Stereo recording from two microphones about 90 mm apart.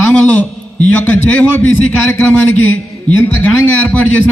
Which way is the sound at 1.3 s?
15° left (ahead or behind).